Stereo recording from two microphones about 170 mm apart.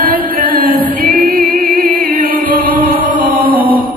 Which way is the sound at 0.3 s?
60° right (ahead or behind).